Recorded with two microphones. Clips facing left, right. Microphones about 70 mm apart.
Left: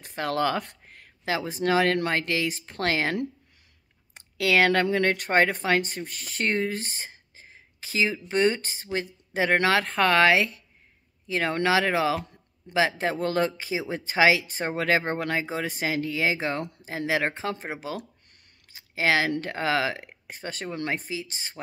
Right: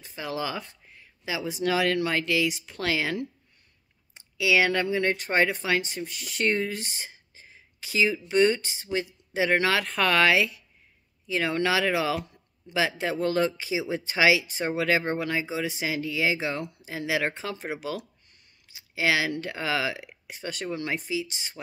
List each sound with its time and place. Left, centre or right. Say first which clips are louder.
0.0 s speech: left 6 dB; left
17.9 s speech: even; left